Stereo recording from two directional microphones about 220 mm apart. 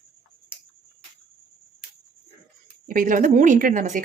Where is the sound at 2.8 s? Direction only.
40° right (ahead or behind).